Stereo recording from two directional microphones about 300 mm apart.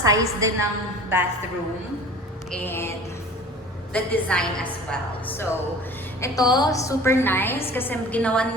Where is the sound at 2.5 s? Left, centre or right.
Centre.